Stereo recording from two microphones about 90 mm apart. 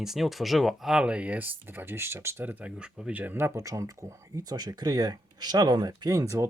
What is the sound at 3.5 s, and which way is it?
Speech, 35° right (ahead or behind).